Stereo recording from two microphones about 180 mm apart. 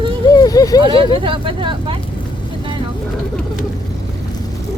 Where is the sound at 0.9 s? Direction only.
30° right (ahead or behind).